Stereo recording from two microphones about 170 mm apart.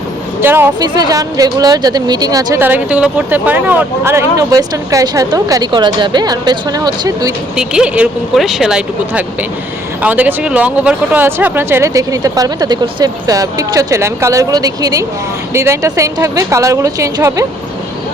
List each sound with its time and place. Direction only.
0.4 s speech: 15° right (ahead or behind)
7.5 s speech: 5° right (ahead or behind)